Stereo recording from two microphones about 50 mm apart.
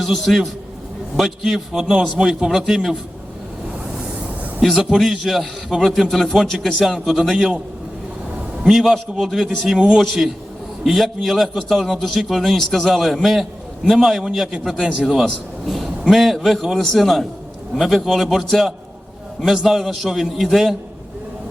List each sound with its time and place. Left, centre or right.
0.0 s a man's voice: centre
4.6 s a man's voice: centre
8.6 s a man's voice: centre
14.8 s a man's voice: centre
15.2 s a man's voice: centre